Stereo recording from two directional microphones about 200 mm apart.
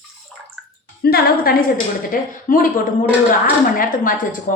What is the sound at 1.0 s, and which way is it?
A woman's voice, 50° left (ahead or behind).